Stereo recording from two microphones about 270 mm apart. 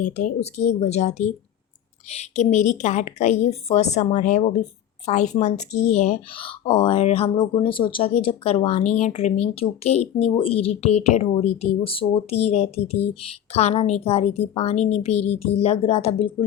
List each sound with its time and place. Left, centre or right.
0.3 s speech: left